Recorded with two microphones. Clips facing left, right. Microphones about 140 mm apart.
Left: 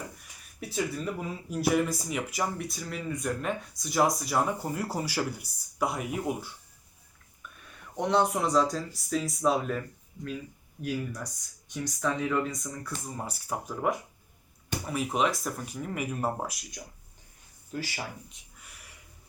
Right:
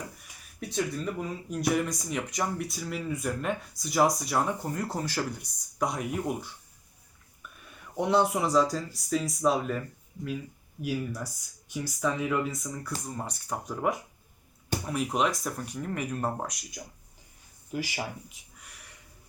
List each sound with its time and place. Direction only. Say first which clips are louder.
0.6 s speech: right 1 dB; 5° left (ahead or behind)
7.9 s speech: right 1 dB; 5° right (ahead or behind)
17.7 s speech: right 3 dB; 15° right (ahead or behind)
18.3 s a sound: right 1 dB; centre (ahead or behind)